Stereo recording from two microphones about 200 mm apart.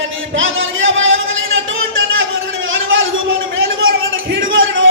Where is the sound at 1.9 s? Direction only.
75° right (ahead or behind).